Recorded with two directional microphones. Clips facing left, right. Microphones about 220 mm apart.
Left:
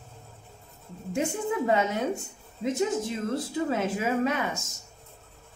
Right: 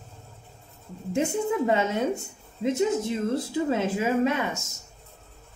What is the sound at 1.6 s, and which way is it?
Speech, 25° right (ahead or behind).